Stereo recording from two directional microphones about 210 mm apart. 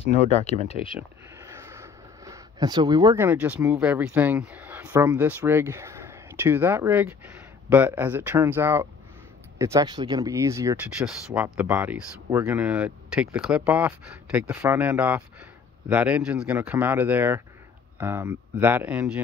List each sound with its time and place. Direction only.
0.2 s speech: 30° left (ahead or behind)
0.8 s speech: 5° right (ahead or behind)
11.0 s speech: centre (ahead or behind)